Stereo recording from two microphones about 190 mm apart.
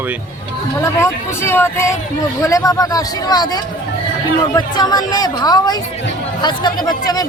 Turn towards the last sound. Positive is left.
turn(degrees=20)  # may be behind; listen again after turning